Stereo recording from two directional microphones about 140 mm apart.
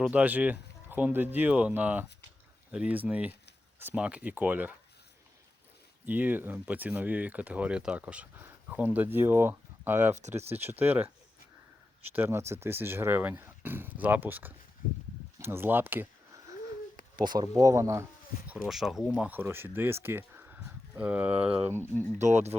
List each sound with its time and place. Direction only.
0.1 s speech: 10° right (ahead or behind)
6.1 s speech: 15° right (ahead or behind)
17.3 s speech: 25° right (ahead or behind)
18.4 s speech: 5° right (ahead or behind)
19.3 s speech: 15° right (ahead or behind)
21.9 s speech: 10° left (ahead or behind)
22.2 s speech: 55° right (ahead or behind)